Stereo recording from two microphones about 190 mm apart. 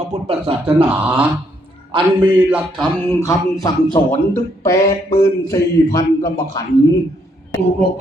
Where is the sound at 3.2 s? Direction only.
15° left (ahead or behind).